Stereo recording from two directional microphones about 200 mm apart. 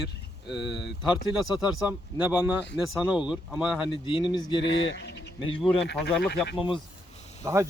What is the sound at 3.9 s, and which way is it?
Speech, 25° left (ahead or behind).